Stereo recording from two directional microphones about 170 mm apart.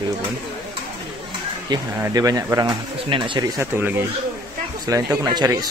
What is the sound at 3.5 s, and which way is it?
Speech, 10° right (ahead or behind).